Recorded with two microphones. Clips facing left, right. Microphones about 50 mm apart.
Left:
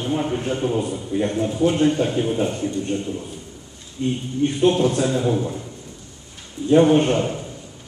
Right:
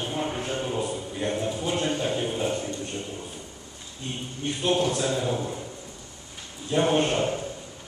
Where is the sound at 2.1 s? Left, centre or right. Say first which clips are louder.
Left 5 dB; centre.